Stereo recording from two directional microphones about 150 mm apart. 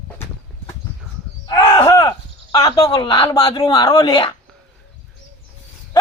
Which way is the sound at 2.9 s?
35° left (ahead or behind).